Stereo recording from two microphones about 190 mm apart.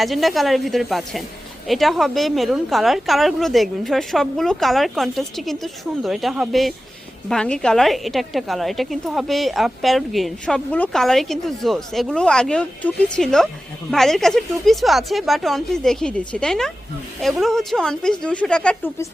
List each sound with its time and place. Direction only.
0.0 s a woman's voice: centre (ahead or behind)